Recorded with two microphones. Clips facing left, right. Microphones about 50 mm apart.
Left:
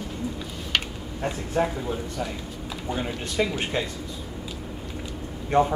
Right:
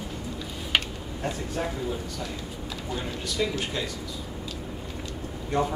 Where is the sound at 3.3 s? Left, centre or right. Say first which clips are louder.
Left 4 dB; left.